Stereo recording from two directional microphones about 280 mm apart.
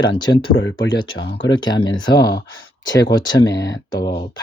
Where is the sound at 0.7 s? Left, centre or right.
Centre.